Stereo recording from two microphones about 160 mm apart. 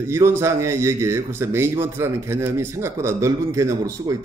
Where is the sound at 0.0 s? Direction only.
15° right (ahead or behind).